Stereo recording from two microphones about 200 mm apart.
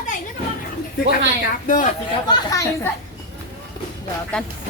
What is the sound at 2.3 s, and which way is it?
Speech, 15° left (ahead or behind).